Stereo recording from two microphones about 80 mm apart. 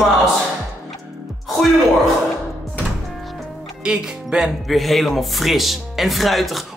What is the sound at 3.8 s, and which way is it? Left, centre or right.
Speech, centre.